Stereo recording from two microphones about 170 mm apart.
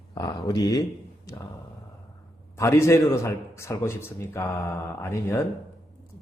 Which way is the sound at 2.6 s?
15° left (ahead or behind).